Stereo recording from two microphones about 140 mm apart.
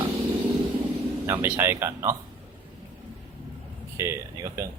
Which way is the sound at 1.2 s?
15° right (ahead or behind).